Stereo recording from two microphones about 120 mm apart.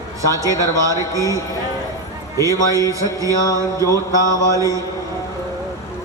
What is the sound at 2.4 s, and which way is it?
A man's voice, 30° right (ahead or behind).